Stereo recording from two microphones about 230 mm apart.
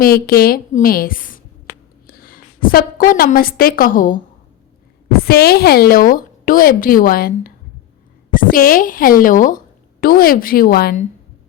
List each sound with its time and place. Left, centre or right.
0.0 s a woman's voice: left